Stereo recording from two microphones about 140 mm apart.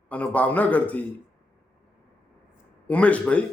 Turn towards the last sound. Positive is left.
turn(degrees=10)  # may be behind; listen again after turning